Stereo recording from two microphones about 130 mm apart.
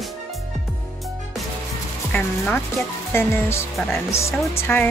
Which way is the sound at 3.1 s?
20° left (ahead or behind).